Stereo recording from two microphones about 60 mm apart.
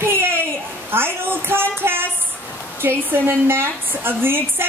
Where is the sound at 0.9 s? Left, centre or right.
Right.